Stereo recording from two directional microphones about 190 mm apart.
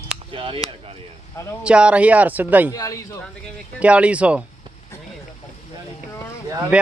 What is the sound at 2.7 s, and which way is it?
Speech, 20° left (ahead or behind).